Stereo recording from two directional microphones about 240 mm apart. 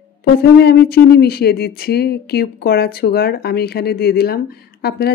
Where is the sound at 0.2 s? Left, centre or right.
Left.